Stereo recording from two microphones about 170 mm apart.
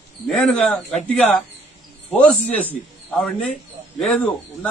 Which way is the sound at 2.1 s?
5° left (ahead or behind).